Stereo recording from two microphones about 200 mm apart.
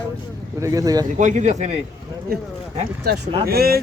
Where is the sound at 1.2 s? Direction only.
40° right (ahead or behind).